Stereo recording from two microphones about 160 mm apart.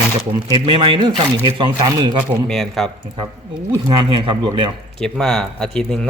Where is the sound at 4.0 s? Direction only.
30° right (ahead or behind).